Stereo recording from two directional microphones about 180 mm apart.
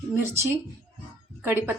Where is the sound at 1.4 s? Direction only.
10° right (ahead or behind).